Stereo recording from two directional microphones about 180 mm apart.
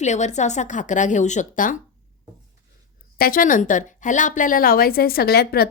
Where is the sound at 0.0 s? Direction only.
40° left (ahead or behind).